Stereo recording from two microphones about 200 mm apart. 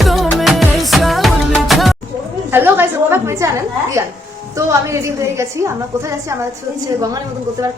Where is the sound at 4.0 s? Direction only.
15° right (ahead or behind).